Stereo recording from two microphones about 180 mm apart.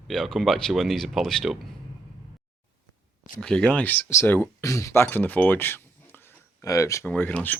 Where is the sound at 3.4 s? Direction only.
5° left (ahead or behind).